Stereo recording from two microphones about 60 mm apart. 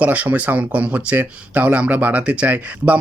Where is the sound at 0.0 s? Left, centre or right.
Right.